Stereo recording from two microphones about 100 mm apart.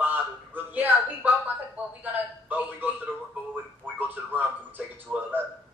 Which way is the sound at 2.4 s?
15° right (ahead or behind).